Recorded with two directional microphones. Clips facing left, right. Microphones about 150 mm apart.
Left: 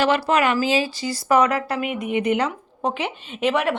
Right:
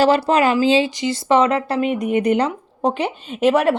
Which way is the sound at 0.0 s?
30° right (ahead or behind).